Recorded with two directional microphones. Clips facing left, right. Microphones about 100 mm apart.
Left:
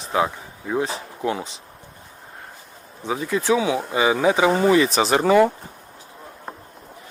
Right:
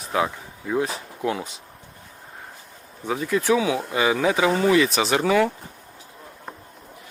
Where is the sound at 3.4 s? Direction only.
25° left (ahead or behind).